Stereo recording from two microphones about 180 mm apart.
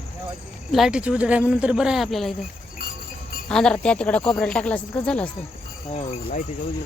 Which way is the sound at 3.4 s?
5° left (ahead or behind).